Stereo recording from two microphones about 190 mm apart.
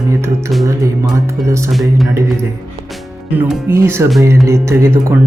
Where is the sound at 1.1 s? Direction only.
15° right (ahead or behind).